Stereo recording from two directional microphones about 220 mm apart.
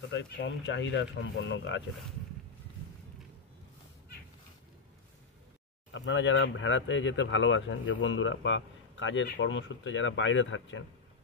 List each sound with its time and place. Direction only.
0.1 s speech: 55° left (ahead or behind)
5.9 s speech: 55° left (ahead or behind)